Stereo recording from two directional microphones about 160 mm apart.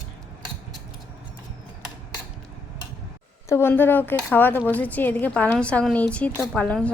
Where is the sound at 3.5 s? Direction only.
15° left (ahead or behind).